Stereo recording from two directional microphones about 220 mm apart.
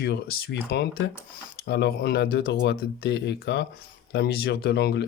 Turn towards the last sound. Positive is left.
turn(degrees=50)  # may be behind; listen again after turning